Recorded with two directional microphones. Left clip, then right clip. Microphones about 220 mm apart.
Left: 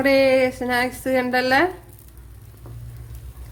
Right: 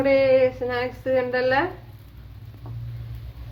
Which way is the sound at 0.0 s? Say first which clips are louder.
Left 1 dB; 40° left (ahead or behind).